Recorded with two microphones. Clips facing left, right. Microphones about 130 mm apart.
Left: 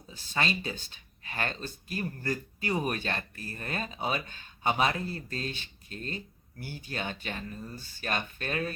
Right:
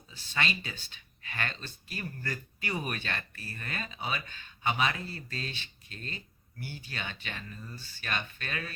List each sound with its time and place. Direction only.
0.1 s speech: 35° left (ahead or behind)